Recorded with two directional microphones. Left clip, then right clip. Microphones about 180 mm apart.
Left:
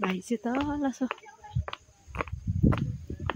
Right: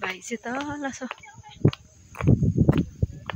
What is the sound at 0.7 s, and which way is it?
Speech, 5° right (ahead or behind).